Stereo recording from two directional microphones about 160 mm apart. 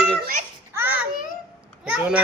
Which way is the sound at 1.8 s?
5° right (ahead or behind).